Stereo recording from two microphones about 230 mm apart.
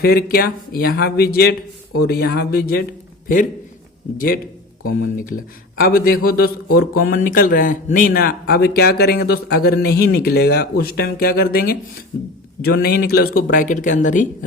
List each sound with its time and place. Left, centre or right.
0.0 s speech: left
4.8 s speech: left